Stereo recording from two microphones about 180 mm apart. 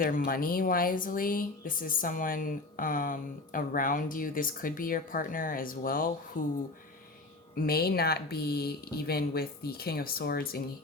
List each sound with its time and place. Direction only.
0.0 s speech: 50° left (ahead or behind)
7.5 s speech: 55° left (ahead or behind)